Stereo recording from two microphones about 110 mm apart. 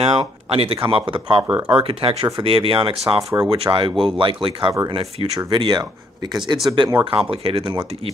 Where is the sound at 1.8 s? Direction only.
60° right (ahead or behind).